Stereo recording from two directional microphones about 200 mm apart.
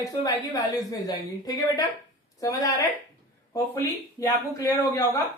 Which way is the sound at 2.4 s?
15° left (ahead or behind).